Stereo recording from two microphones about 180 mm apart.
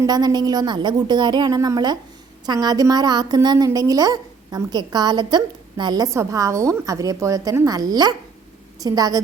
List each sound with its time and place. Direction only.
0.0 s a woman's voice: 20° right (ahead or behind)